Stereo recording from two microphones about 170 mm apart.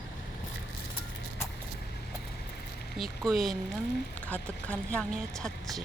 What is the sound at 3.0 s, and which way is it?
A woman's voice, centre (ahead or behind).